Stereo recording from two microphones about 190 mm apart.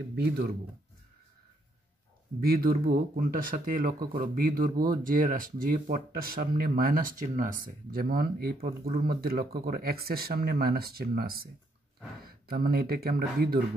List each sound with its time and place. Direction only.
0.1 s speech: 55° right (ahead or behind)
2.4 s speech: 50° right (ahead or behind)